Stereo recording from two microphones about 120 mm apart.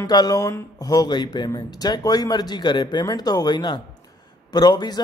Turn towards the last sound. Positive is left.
turn(degrees=35)  # may be behind; listen again after turning